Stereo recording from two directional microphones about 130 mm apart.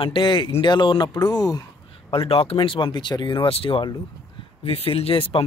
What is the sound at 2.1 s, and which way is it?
Speech, 45° left (ahead or behind).